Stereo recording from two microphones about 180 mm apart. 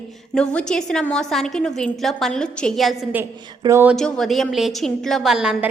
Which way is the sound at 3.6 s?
15° right (ahead or behind).